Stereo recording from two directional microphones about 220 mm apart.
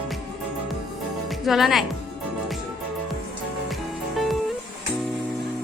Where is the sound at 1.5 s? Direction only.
Centre (ahead or behind).